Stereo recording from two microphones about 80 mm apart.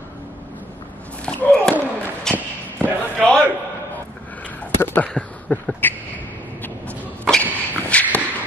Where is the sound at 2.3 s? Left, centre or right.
Centre.